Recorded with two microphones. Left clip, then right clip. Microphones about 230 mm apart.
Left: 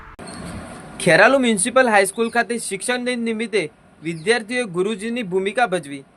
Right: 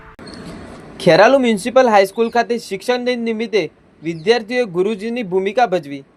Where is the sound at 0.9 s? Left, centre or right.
Centre.